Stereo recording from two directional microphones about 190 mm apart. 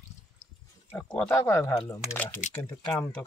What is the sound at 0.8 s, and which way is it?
Speech, 10° left (ahead or behind).